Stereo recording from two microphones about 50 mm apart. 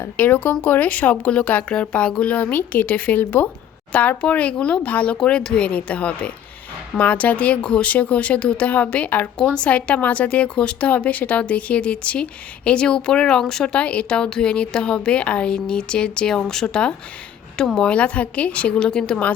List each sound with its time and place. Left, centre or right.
0.2 s a woman's voice: left
2.3 s a woman's voice: left; by 13.8 s centre
13.8 s a woman's voice: left